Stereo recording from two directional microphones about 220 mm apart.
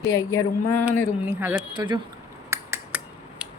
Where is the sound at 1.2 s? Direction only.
10° right (ahead or behind).